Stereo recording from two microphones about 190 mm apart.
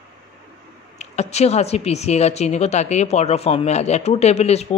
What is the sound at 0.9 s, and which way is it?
A woman's voice, 35° left (ahead or behind).